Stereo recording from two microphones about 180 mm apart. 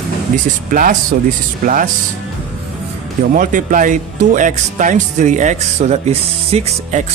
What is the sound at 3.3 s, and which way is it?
Speech, 50° right (ahead or behind).